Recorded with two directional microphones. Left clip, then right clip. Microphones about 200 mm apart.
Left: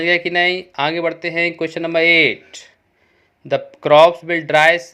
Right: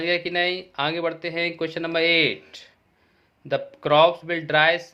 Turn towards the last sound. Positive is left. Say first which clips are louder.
# left 6 dB
turn(degrees=25)  # may be behind; listen again after turning